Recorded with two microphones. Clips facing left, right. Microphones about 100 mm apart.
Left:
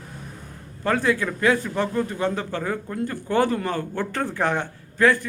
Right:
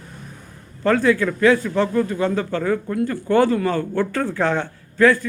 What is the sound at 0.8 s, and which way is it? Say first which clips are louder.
A man's voice: right 5 dB; 15° left (ahead or behind).